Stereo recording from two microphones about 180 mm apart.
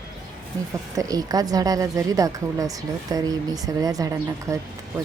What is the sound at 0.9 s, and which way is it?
A woman's voice, 20° right (ahead or behind).